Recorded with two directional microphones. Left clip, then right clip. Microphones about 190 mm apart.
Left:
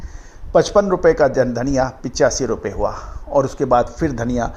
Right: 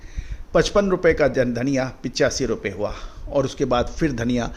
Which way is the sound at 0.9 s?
25° right (ahead or behind).